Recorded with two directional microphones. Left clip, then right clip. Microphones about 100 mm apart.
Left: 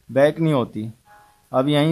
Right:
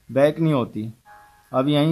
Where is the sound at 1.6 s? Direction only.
50° left (ahead or behind).